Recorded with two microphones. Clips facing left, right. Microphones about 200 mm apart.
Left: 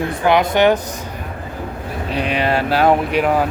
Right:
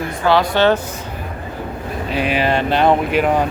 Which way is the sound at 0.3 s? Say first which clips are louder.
Even; 15° left (ahead or behind).